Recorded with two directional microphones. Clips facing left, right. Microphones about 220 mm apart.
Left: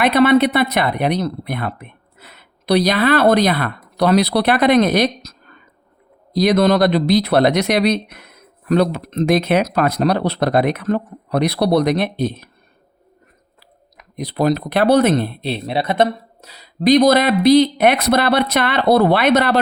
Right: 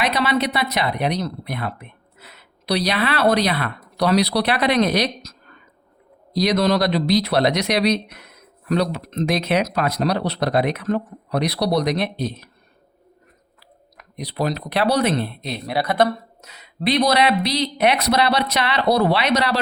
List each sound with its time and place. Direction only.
0.0 s speech: 55° left (ahead or behind)
6.3 s speech: 50° left (ahead or behind)
14.2 s speech: 50° left (ahead or behind)
15.4 s speech: 25° left (ahead or behind); by 19.5 s 55° left (ahead or behind)